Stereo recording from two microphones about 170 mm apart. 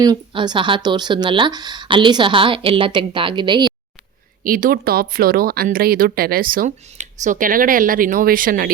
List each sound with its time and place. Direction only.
0.0 s speech: 25° right (ahead or behind)
4.4 s speech: 55° right (ahead or behind)